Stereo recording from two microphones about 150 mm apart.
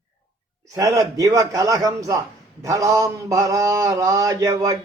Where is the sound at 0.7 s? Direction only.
25° right (ahead or behind).